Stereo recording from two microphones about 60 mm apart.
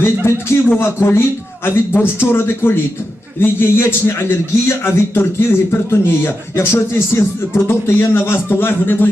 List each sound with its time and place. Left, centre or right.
0.0 s a man's voice: left